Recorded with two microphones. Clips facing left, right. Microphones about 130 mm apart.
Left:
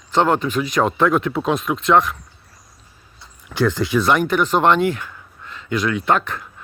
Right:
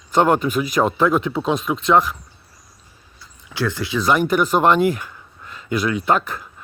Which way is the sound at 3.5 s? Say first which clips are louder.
Left 5 dB; 15° left (ahead or behind).